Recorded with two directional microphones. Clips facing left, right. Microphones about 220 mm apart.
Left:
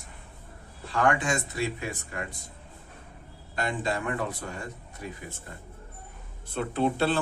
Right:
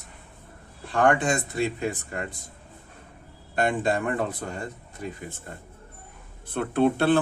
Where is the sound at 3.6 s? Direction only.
50° right (ahead or behind).